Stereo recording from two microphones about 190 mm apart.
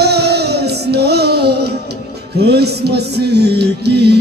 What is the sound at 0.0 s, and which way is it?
Music, 60° right (ahead or behind).